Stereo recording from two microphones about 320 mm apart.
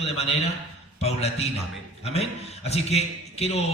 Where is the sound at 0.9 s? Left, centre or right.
Centre.